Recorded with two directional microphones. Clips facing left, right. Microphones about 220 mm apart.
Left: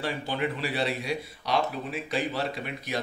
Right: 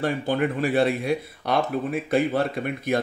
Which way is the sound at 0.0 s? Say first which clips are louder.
Right 6 dB; 50° right (ahead or behind).